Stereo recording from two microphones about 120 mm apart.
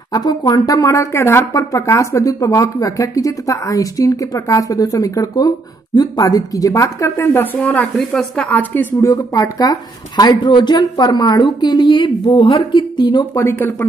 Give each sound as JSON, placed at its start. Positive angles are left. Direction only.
{"t": 0.1, "sound": "speech", "side_deg": 35}
{"t": 9.1, "sound": "a woman's voice", "side_deg": 30}